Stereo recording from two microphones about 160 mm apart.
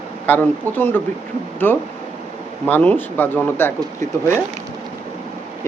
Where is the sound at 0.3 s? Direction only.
10° left (ahead or behind).